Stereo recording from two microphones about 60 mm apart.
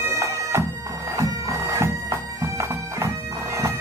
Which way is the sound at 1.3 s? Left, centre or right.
Right.